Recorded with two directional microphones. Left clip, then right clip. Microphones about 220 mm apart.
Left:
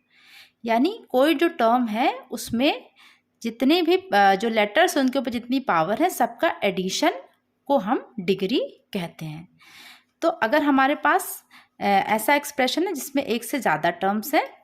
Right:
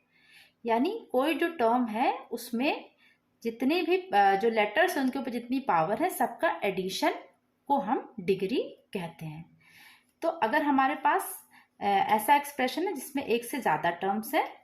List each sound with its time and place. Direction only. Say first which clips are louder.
0.3 s a woman's voice: left 5 dB; 40° left (ahead or behind)